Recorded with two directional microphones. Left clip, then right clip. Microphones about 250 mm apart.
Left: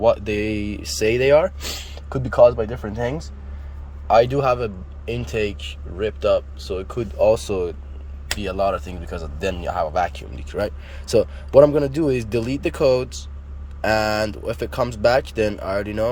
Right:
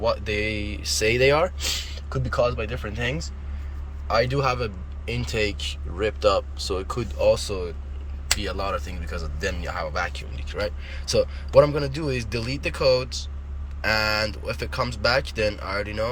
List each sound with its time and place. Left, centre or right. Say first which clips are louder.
0.0 s speech: left 6 dB; left
2.0 s speech: left 10 dB; left
4.1 s speech: left 7 dB; left